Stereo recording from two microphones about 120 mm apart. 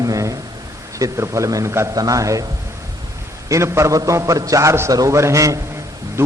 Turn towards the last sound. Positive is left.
turn(degrees=-20)  # may be behind; listen again after turning